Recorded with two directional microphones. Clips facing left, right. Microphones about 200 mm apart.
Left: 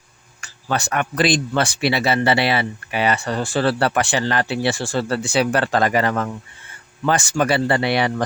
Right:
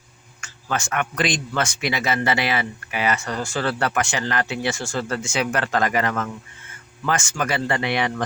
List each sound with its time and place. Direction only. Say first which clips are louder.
0.4 s speech: left 3 dB; 35° left (ahead or behind)